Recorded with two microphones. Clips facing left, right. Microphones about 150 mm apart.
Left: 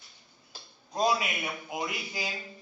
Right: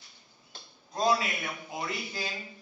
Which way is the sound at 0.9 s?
20° left (ahead or behind).